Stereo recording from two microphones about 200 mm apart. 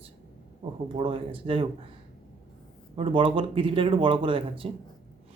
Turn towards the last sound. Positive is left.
turn(degrees=-25)  # may be behind; listen again after turning